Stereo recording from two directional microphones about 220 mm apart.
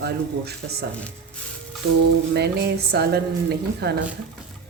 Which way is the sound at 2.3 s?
50° right (ahead or behind).